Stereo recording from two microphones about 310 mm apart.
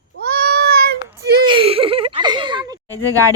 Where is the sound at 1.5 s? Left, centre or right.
Centre.